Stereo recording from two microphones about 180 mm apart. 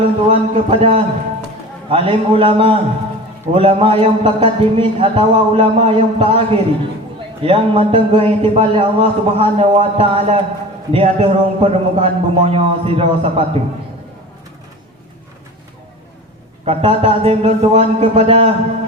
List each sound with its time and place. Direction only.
0.0 s speech: 30° right (ahead or behind)
16.6 s speech: 30° right (ahead or behind)